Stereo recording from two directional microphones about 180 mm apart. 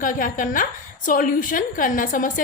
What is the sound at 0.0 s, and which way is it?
A woman's voice, 50° left (ahead or behind).